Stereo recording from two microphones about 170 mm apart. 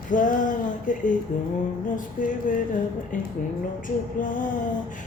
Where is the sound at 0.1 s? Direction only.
50° left (ahead or behind).